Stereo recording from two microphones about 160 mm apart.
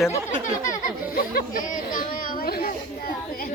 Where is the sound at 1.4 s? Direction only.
55° left (ahead or behind).